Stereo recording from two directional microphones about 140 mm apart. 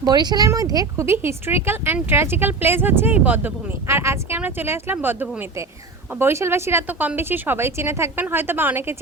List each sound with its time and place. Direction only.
0.0 s speech: 30° right (ahead or behind)